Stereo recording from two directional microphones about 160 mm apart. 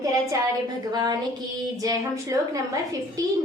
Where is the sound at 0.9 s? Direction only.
25° right (ahead or behind).